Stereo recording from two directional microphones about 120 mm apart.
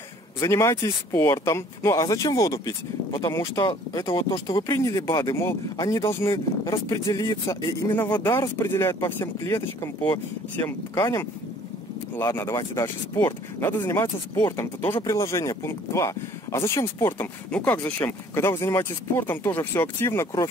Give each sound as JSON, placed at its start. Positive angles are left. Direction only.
{"t": 0.4, "sound": "speech", "side_deg": 25}
{"t": 4.6, "sound": "speech", "side_deg": 30}
{"t": 7.9, "sound": "speech", "side_deg": 15}
{"t": 17.5, "sound": "speech", "side_deg": 10}